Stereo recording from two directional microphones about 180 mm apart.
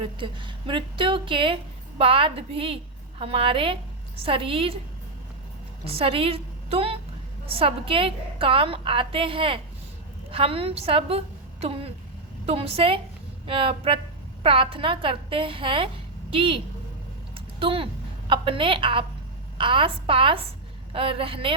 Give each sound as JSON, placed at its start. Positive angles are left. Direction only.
{"t": 0.0, "sound": "a woman's voice", "side_deg": -25}
{"t": 5.8, "sound": "a woman's voice", "side_deg": -30}
{"t": 17.3, "sound": "a sound", "side_deg": -30}
{"t": 18.3, "sound": "a woman's voice", "side_deg": -30}